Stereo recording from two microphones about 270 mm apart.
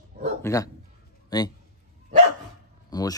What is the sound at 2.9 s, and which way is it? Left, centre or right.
Speech, centre.